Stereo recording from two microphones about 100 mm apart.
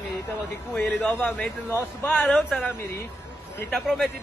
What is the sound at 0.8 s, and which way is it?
Speech, 20° left (ahead or behind).